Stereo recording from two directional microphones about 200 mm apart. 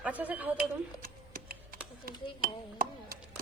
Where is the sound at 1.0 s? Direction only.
45° right (ahead or behind).